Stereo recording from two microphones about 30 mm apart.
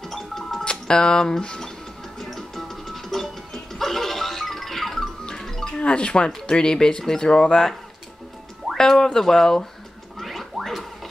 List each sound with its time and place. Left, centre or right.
0.0 s music: centre
0.7 s speech: left
2.1 s music: centre
5.8 s speech: left
7.2 s speech: left
8.7 s speech: centre
10.1 s rodents: centre
10.6 s a sound: centre